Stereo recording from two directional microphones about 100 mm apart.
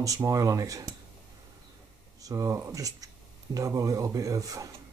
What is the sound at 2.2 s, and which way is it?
Speech, 35° right (ahead or behind).